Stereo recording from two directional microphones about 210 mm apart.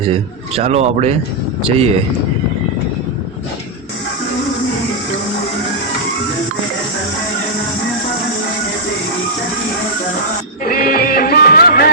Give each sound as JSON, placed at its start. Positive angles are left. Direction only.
{"t": 0.1, "sound": "a man's voice", "side_deg": -30}
{"t": 10.6, "sound": "music", "side_deg": 45}